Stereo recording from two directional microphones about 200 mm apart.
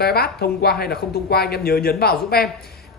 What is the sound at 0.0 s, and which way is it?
Speech, 50° left (ahead or behind).